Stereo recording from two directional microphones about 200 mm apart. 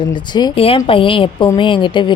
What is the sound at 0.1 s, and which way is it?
Speech, 20° left (ahead or behind).